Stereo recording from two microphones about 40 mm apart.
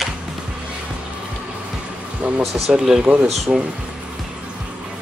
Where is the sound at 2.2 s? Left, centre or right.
Right.